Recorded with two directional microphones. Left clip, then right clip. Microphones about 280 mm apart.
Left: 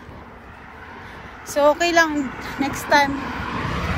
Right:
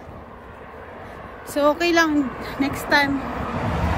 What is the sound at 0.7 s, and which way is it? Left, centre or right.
Vehicle, right.